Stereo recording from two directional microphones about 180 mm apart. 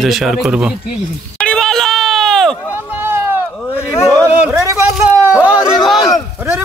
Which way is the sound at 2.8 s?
15° right (ahead or behind).